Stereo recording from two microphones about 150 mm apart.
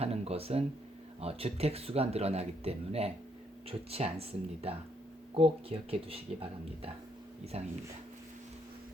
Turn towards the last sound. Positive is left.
turn(degrees=-45)  # may be behind; listen again after turning